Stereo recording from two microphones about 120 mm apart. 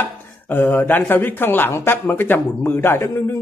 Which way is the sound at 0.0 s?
15° left (ahead or behind).